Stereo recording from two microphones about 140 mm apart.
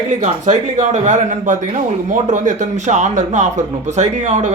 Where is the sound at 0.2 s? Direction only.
55° right (ahead or behind).